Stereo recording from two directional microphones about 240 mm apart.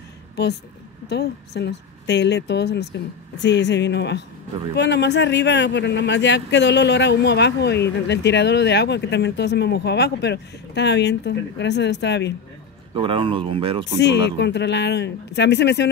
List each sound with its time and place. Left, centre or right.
0.4 s a man's voice: left
12.9 s speech: right
13.9 s a man's voice: left